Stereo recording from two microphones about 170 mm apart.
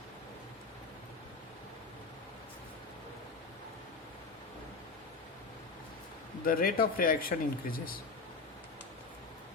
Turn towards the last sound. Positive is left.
turn(degrees=60)  # may be behind; listen again after turning